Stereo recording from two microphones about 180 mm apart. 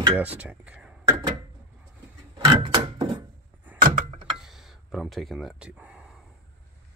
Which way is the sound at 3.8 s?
40° right (ahead or behind).